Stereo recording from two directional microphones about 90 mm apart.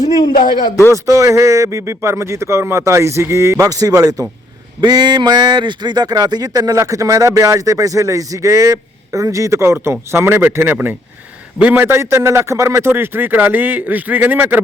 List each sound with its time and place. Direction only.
0.0 s a man's voice: 60° left (ahead or behind)
0.9 s speech: 35° right (ahead or behind)
4.8 s a man's voice: 55° right (ahead or behind); by 14.6 s 20° right (ahead or behind)